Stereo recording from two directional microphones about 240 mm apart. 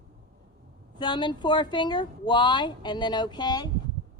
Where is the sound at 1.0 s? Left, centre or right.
Centre.